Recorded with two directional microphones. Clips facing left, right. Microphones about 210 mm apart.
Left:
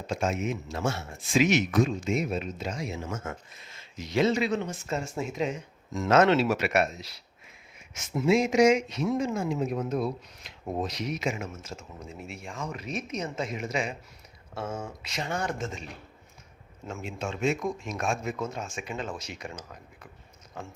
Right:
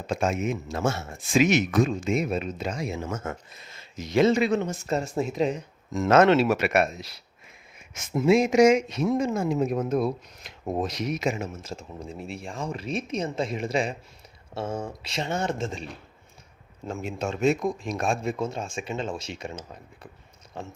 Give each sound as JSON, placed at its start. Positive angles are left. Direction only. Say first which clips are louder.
{"t": 0.1, "sound": "speech", "louder": "right 3 dB", "side_deg": -55}
{"t": 11.3, "sound": "speech", "louder": "right 4 dB", "side_deg": -30}